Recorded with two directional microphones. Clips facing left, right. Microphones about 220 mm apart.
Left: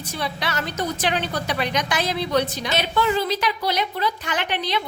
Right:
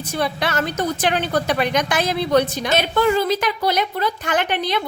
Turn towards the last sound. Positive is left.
turn(degrees=-50)  # may be behind; listen again after turning